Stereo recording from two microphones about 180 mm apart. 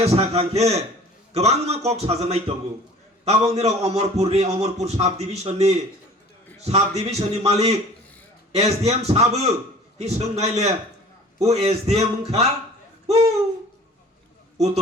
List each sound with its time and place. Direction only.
0.0 s a man's voice: 35° right (ahead or behind)